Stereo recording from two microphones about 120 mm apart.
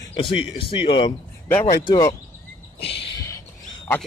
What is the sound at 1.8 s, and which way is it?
Speech, 35° left (ahead or behind).